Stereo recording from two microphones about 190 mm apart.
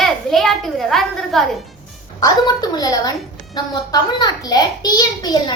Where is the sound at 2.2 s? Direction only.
20° left (ahead or behind).